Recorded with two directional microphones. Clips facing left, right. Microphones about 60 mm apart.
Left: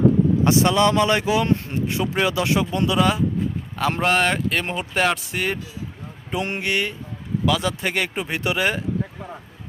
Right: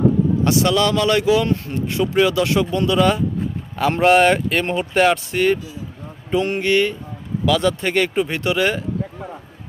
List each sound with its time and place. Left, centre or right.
0.4 s speech: left; by 5.5 s centre
6.3 s speech: left
6.6 s speech: centre